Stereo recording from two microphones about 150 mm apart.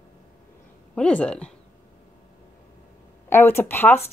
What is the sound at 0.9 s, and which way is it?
Speech, 5° left (ahead or behind).